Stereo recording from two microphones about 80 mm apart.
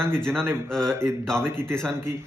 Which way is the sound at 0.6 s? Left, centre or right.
Centre.